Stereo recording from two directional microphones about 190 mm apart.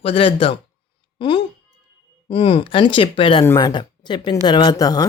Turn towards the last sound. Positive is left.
turn(degrees=20)  # may be behind; listen again after turning